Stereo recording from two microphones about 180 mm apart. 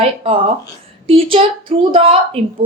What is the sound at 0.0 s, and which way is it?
A woman's voice, 30° right (ahead or behind).